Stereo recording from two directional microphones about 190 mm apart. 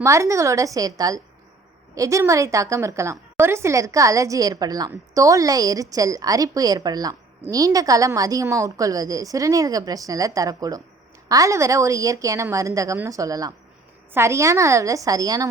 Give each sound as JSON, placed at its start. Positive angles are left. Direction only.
{"t": 0.0, "sound": "a woman's voice", "side_deg": -15}